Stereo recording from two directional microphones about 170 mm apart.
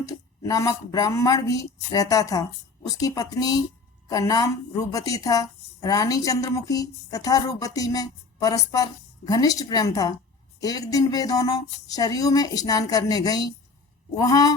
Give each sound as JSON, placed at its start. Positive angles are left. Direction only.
{"t": 0.1, "sound": "a woman's voice", "side_deg": 20}